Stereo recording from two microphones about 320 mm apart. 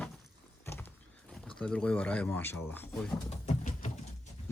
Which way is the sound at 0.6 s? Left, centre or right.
Centre.